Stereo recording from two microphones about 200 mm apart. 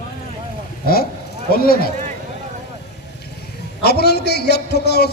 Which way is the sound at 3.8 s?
55° left (ahead or behind).